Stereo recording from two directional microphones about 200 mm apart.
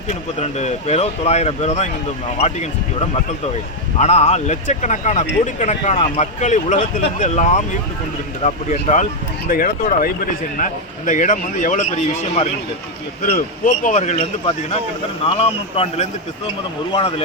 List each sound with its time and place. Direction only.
0.3 s speech: 35° left (ahead or behind)
13.8 s speech: 35° left (ahead or behind)